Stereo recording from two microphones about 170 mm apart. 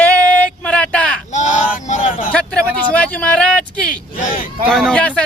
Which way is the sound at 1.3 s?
45° left (ahead or behind).